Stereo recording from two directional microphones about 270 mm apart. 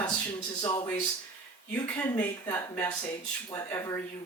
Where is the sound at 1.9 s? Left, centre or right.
Centre.